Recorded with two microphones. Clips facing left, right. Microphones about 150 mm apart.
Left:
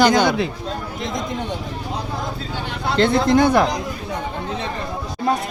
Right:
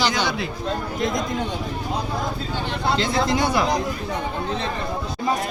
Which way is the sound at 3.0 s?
55° left (ahead or behind).